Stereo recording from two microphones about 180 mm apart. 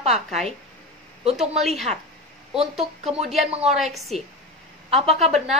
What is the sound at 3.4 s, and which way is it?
Speech, 35° right (ahead or behind).